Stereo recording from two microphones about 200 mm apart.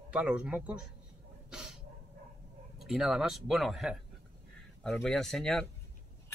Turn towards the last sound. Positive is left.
turn(degrees=5)  # may be behind; listen again after turning